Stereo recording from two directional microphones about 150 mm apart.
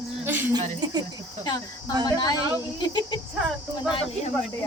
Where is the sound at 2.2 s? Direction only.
25° left (ahead or behind).